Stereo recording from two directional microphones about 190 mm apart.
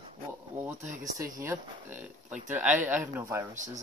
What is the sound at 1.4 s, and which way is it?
Speech, 10° right (ahead or behind).